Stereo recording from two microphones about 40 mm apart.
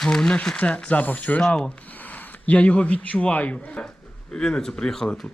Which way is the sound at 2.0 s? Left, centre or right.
Left.